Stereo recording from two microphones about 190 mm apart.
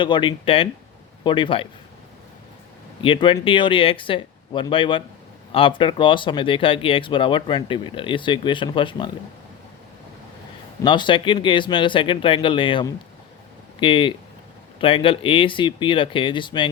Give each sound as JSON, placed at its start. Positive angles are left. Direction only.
{"t": 0.0, "sound": "speech", "side_deg": 25}
{"t": 3.0, "sound": "speech", "side_deg": 25}
{"t": 10.8, "sound": "speech", "side_deg": 25}